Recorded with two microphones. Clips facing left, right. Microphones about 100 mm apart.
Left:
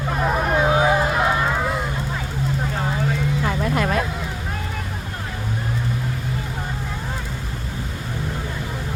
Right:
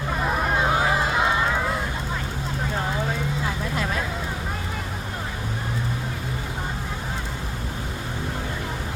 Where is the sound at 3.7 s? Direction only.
60° left (ahead or behind).